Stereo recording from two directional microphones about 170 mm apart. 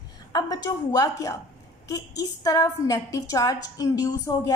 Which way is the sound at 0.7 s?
20° left (ahead or behind).